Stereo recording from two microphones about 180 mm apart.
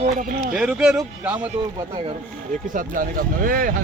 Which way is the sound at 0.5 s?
5° right (ahead or behind).